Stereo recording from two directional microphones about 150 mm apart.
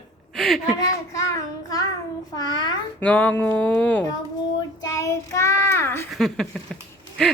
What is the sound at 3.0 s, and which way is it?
Music, 10° left (ahead or behind).